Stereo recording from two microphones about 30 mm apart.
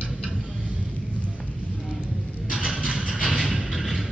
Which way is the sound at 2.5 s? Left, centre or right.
Centre.